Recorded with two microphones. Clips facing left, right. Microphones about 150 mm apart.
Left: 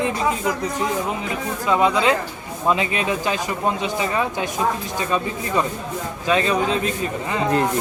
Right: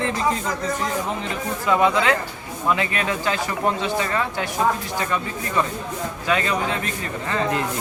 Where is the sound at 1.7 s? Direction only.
20° left (ahead or behind).